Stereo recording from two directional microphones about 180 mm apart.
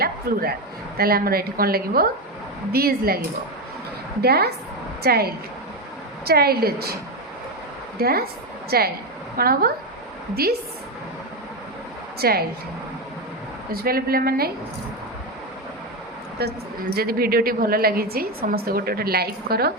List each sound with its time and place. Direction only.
0.0 s a woman's voice: 55° right (ahead or behind)
4.2 s a woman's voice: 60° right (ahead or behind)
7.9 s a woman's voice: 60° right (ahead or behind)
12.2 s a woman's voice: 60° right (ahead or behind)
13.7 s a woman's voice: 55° right (ahead or behind)
16.4 s a woman's voice: 60° right (ahead or behind)